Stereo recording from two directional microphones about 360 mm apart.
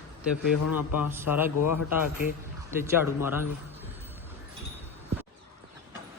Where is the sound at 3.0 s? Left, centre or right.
Centre.